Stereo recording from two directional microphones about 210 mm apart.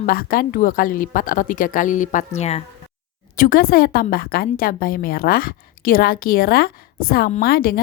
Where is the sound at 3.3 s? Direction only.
45° left (ahead or behind).